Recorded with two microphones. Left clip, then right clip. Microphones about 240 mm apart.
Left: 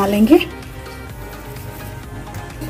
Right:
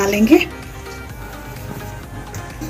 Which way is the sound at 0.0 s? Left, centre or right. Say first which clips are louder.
Even; left.